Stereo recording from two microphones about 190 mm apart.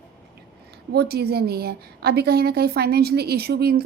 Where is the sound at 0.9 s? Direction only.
60° right (ahead or behind).